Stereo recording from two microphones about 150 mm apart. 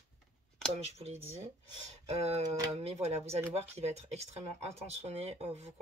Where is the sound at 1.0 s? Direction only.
45° right (ahead or behind).